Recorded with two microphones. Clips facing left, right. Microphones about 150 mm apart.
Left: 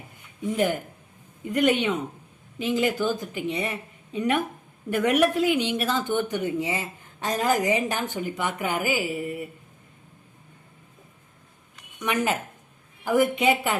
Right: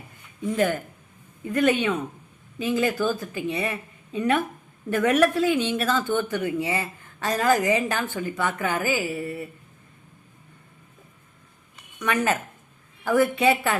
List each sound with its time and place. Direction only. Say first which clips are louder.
0.5 s speech: right 1 dB; 15° left (ahead or behind)
12.0 s speech: right 1 dB; 15° left (ahead or behind)